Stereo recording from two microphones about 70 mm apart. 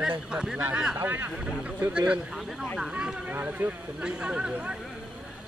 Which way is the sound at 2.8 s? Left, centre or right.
Centre.